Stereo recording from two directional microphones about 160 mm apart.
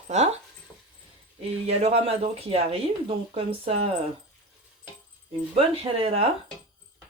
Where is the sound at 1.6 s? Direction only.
40° right (ahead or behind).